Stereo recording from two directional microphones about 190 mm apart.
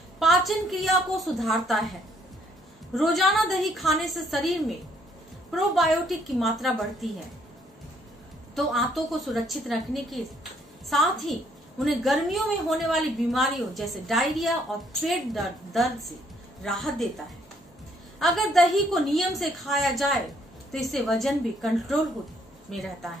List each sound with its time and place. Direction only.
0.2 s a woman's voice: centre (ahead or behind)
8.5 s a woman's voice: centre (ahead or behind)
18.2 s a woman's voice: centre (ahead or behind)